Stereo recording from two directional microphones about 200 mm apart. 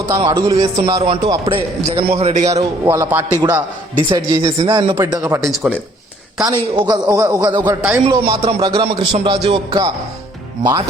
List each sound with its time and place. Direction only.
0.2 s a man's voice: 20° right (ahead or behind)
2.6 s a man's voice: 15° right (ahead or behind)
5.4 s speech: centre (ahead or behind)
6.4 s a man's voice: 20° right (ahead or behind)
8.2 s a man's voice: 30° right (ahead or behind)